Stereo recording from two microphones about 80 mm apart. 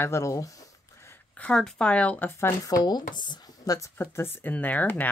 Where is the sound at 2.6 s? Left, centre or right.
Left.